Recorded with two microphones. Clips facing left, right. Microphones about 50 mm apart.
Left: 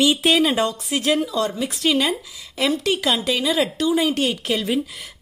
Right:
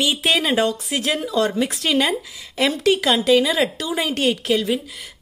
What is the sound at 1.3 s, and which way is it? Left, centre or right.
Speech, right.